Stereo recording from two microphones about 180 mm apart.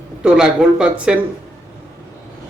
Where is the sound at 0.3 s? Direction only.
5° right (ahead or behind).